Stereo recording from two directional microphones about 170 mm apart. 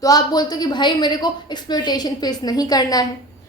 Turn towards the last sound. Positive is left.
turn(degrees=20)  # may be behind; listen again after turning